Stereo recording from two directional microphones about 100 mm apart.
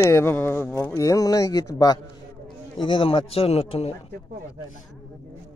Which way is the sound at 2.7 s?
55° left (ahead or behind).